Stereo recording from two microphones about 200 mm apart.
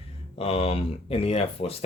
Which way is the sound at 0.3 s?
30° left (ahead or behind).